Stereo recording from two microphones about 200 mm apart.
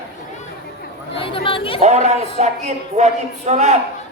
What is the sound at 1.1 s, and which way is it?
Speech, 25° left (ahead or behind).